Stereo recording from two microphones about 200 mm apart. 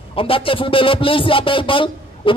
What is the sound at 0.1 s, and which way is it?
A man's voice, 25° left (ahead or behind).